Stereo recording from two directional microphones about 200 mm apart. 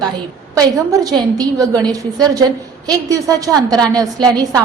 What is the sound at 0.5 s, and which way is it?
A woman's voice, 20° right (ahead or behind).